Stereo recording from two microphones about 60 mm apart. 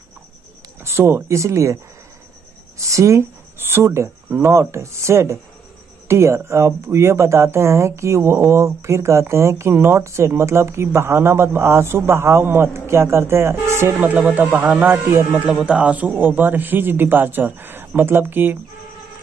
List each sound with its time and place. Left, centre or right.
0.8 s speech: right
2.9 s speech: right
3.5 s speech: right
13.9 s a man's voice: right